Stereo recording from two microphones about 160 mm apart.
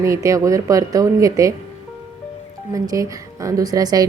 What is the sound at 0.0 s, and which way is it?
A woman's voice, 20° right (ahead or behind).